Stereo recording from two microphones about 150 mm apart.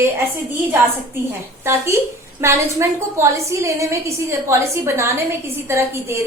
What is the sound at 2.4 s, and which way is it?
A woman's voice, 20° right (ahead or behind).